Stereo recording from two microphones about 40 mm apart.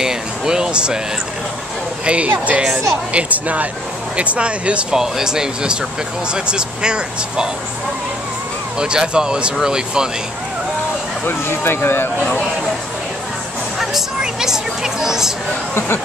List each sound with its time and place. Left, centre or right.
0.0 s a sound: centre
2.2 s speech: right
4.9 s speech: centre
8.7 s speech: right
11.2 s speech: left
14.2 s a sound: centre